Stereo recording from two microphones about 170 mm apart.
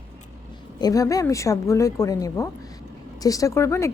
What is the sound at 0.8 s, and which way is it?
Speech, 20° left (ahead or behind).